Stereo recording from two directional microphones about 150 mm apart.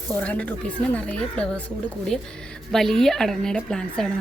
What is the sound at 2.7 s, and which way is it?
Speech, centre (ahead or behind).